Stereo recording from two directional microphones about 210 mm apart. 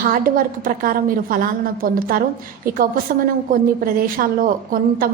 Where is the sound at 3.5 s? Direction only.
45° right (ahead or behind).